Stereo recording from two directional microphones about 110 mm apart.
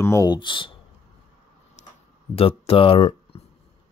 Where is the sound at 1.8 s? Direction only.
90° left.